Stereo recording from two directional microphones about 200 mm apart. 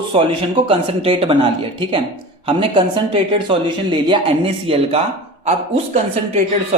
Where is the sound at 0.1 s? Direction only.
25° right (ahead or behind).